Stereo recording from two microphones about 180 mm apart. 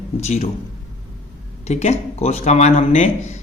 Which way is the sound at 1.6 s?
35° left (ahead or behind).